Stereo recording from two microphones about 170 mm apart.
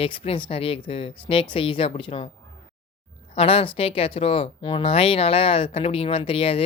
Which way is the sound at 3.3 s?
35° left (ahead or behind).